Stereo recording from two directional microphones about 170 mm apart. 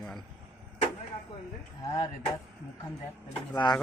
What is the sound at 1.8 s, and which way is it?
Speech, 20° left (ahead or behind).